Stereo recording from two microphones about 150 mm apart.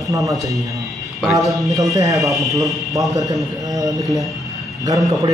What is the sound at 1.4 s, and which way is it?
Speech, centre (ahead or behind).